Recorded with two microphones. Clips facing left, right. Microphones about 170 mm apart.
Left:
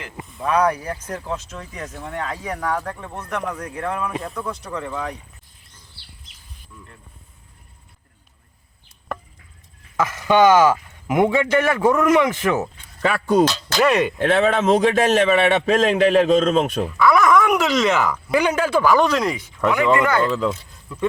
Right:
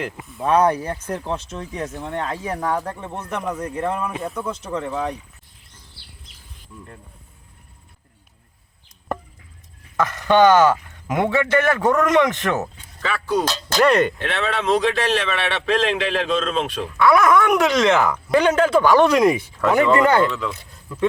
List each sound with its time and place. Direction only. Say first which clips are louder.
0.4 s speech: right 2 dB; 30° right (ahead or behind)
4.1 s speech: right 1 dB; 5° right (ahead or behind)
4.4 s speech: right 2 dB; 20° right (ahead or behind)
6.7 s speech: right 4 dB; 20° right (ahead or behind)
10.0 s a man's voice: even; 10° left (ahead or behind)
13.0 s a man's voice: left 4 dB; 50° left (ahead or behind)
13.7 s speech: right 2 dB; centre (ahead or behind)
14.3 s a man's voice: left 5 dB; 50° left (ahead or behind)
17.0 s speech: right 1 dB; centre (ahead or behind)
19.0 s speech: right 5 dB; 10° right (ahead or behind)
19.3 s speech: right 2 dB; 25° right (ahead or behind)